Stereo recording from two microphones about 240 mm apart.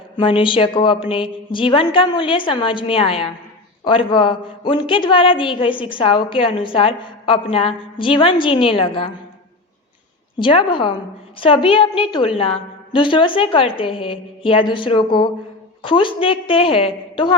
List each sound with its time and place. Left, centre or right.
0.2 s a woman's voice: left
10.3 s a woman's voice: left